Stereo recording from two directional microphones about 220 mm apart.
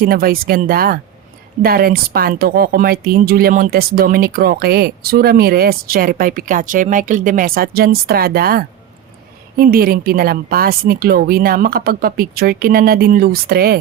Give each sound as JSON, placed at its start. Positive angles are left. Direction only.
{"t": 0.0, "sound": "speech", "side_deg": -40}